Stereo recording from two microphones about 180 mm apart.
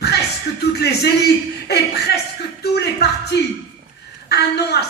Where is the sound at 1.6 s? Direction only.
65° left (ahead or behind).